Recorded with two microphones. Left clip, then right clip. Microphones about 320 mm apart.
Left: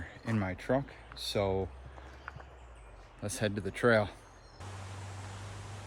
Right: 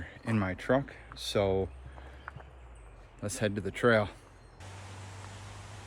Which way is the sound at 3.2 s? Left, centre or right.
Centre.